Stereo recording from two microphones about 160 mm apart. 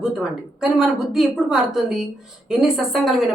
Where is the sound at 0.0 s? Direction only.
5° right (ahead or behind).